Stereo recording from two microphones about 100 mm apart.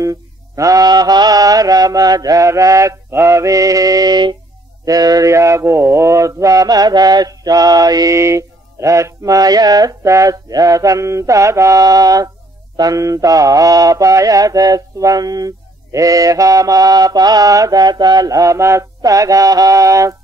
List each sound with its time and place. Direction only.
0.0 s mantra: 35° right (ahead or behind)
4.8 s a sound: 35° right (ahead or behind)
12.7 s mantra: 35° right (ahead or behind)